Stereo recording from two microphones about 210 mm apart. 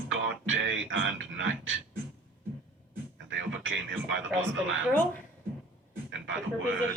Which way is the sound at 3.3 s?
65° right (ahead or behind).